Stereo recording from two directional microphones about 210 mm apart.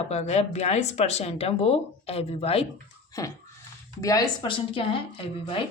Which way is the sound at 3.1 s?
15° left (ahead or behind).